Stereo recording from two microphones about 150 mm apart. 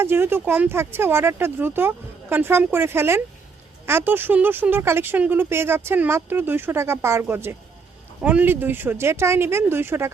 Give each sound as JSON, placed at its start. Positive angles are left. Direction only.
{"t": 0.0, "sound": "speech", "side_deg": -15}